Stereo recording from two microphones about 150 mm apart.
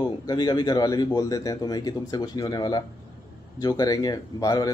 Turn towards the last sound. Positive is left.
turn(degrees=25)  # may be behind; listen again after turning